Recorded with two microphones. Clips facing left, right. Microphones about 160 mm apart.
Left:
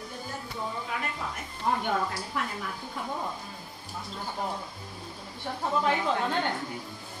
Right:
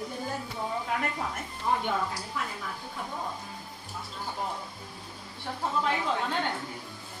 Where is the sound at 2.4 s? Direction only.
70° left (ahead or behind).